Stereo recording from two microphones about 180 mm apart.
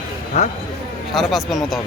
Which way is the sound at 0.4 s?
40° left (ahead or behind).